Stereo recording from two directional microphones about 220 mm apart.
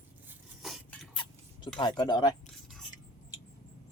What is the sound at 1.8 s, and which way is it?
Speech, 20° left (ahead or behind).